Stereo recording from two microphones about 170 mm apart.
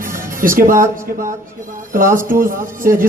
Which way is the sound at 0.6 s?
55° right (ahead or behind).